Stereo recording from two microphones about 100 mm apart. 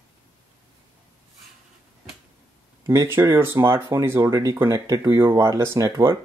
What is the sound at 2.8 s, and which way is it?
Speech, 30° right (ahead or behind).